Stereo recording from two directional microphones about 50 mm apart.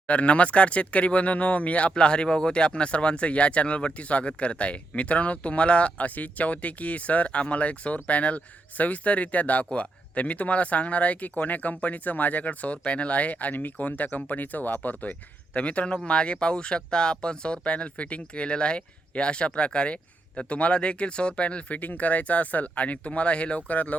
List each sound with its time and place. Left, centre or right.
0.1 s speech: left